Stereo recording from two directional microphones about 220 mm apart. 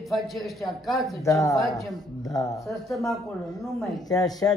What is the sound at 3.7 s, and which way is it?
Speech, centre (ahead or behind).